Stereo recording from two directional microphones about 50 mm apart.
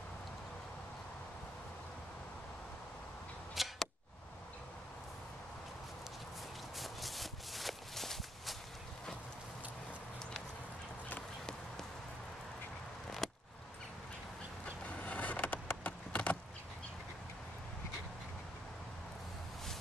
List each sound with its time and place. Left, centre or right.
3.5 s arrow: centre
6.8 s walk: centre
13.2 s a sound: centre
14.9 s vehicle: left